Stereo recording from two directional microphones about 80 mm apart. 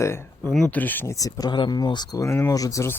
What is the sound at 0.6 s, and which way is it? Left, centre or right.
Speech, left.